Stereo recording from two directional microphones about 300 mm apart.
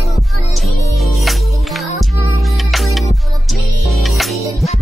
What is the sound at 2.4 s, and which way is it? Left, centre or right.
Music, centre.